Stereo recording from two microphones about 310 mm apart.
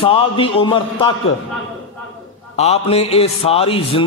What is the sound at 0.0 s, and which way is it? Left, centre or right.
A man's voice, centre.